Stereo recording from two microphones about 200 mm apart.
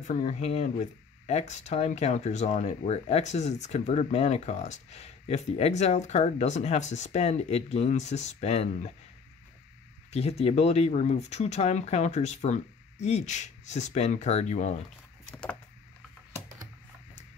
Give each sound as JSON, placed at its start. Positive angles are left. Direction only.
{"t": 0.0, "sound": "speech", "side_deg": 35}
{"t": 10.1, "sound": "speech", "side_deg": 30}